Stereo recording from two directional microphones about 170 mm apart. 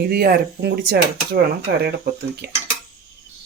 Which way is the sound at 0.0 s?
65° right (ahead or behind).